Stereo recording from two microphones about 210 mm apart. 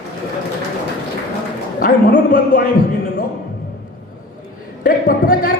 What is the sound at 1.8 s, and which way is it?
Speech, 40° left (ahead or behind).